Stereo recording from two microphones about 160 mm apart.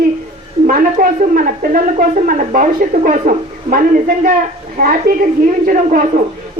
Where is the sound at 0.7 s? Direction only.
55° right (ahead or behind).